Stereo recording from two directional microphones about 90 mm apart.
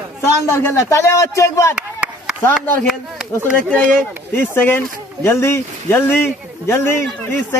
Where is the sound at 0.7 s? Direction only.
35° left (ahead or behind).